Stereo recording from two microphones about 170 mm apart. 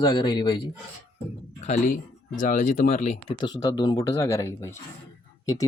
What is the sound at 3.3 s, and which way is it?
Speech, 25° left (ahead or behind).